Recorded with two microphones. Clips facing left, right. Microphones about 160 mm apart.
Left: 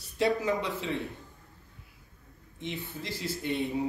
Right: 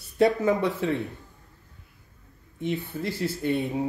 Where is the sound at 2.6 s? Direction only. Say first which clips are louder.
Right 9 dB; 55° right (ahead or behind).